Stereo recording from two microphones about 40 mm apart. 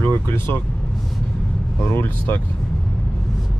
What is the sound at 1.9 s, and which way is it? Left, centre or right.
Speech, left.